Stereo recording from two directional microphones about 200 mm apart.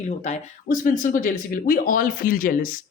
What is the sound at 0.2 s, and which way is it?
Speech, 40° left (ahead or behind).